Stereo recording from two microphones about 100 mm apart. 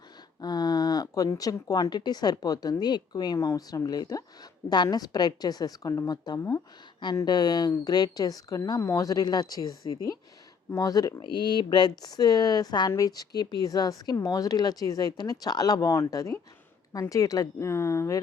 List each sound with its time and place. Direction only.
0.4 s speech: 40° left (ahead or behind)
11.2 s speech: 50° left (ahead or behind); by 18.2 s 30° left (ahead or behind)